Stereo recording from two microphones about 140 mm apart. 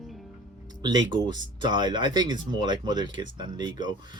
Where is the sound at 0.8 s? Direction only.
30° right (ahead or behind).